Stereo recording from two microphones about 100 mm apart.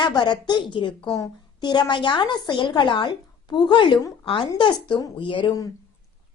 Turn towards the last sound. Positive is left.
turn(degrees=55)  # may be behind; listen again after turning